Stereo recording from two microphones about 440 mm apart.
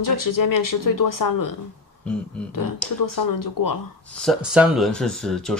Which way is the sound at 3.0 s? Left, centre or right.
Left.